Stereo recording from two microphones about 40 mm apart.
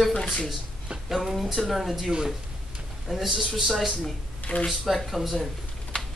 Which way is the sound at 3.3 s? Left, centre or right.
Centre.